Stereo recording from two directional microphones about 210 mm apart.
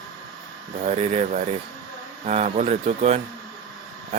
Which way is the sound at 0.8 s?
35° right (ahead or behind).